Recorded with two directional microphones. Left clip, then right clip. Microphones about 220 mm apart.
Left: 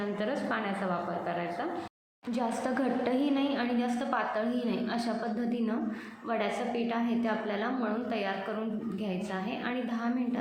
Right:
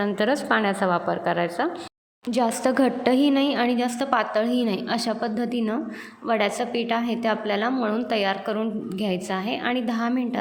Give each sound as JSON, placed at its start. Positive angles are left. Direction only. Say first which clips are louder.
{"t": 0.0, "sound": "a woman's voice", "louder": "right 9 dB", "side_deg": -45}